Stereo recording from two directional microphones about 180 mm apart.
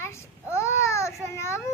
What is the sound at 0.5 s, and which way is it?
Babbling, 15° left (ahead or behind).